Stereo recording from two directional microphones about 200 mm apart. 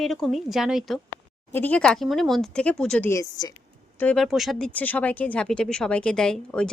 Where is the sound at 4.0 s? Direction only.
5° left (ahead or behind).